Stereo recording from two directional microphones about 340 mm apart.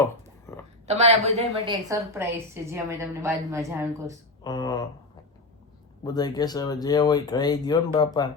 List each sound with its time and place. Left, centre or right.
0.0 s a sound: centre
0.9 s a woman's voice: centre
4.4 s speech: centre
6.1 s speech: centre